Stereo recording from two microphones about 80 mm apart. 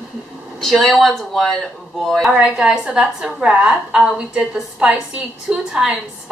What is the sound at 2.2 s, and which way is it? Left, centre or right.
A woman's voice, centre.